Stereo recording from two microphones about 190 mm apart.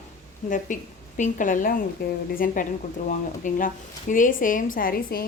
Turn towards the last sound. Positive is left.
turn(degrees=50)  # may be behind; listen again after turning